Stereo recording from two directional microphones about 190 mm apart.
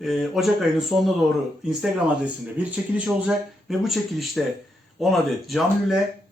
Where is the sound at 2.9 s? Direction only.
5° right (ahead or behind).